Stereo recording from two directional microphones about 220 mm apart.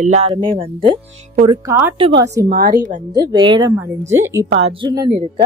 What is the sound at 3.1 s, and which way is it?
Speech, 20° right (ahead or behind).